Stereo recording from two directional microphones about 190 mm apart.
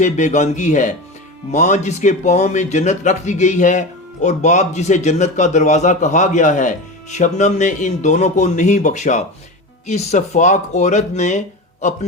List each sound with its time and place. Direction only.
0.0 s speech: 40° left (ahead or behind)